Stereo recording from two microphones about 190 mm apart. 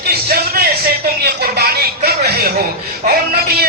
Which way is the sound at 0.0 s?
55° right (ahead or behind).